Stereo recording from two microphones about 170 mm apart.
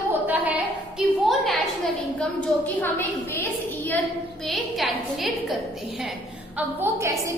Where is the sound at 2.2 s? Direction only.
10° left (ahead or behind).